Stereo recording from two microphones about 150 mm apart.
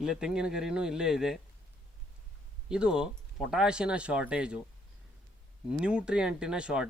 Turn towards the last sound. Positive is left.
turn(degrees=-5)  # may be behind; listen again after turning